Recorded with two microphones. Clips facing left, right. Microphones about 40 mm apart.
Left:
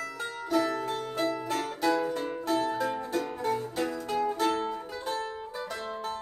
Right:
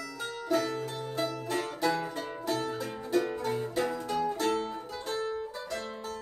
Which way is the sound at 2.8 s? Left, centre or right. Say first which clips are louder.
Left 1 dB; left.